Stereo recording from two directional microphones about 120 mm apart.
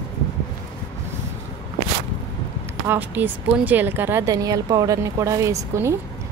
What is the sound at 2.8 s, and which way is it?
Speech, 15° right (ahead or behind).